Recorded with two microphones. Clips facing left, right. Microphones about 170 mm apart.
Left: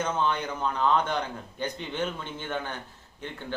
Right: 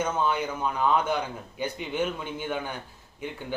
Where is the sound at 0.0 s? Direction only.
10° right (ahead or behind).